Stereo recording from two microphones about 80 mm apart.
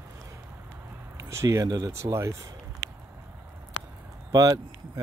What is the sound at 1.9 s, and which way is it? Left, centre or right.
Speech, right.